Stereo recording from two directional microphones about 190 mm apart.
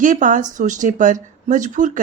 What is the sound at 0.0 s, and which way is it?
Speech, 45° right (ahead or behind).